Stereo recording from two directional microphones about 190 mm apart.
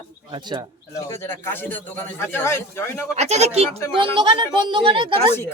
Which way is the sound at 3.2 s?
35° right (ahead or behind).